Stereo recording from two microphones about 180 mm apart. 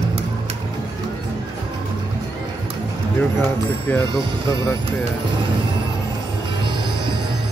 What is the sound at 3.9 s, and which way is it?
Speech, 15° left (ahead or behind).